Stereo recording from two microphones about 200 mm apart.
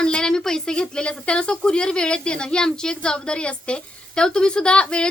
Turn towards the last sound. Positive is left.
turn(degrees=5)  # may be behind; listen again after turning